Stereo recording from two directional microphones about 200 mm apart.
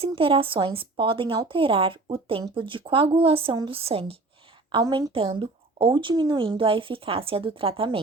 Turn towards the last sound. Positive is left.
turn(degrees=-25)  # may be behind; listen again after turning